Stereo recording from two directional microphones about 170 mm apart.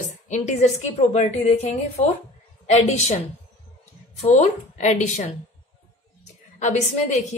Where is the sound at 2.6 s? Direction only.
40° left (ahead or behind).